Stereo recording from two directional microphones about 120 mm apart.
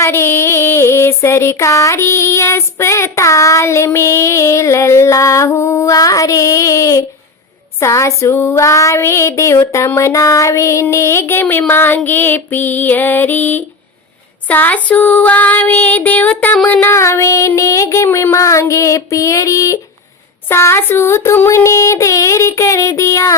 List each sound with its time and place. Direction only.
0.0 s music: 20° left (ahead or behind)
11.7 s child singing: 20° left (ahead or behind)
16.6 s music: 15° left (ahead or behind)